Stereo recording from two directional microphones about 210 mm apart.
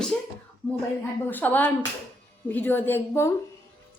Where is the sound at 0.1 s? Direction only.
5° left (ahead or behind).